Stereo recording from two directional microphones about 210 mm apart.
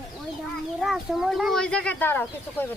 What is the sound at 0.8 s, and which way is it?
Speech, centre (ahead or behind).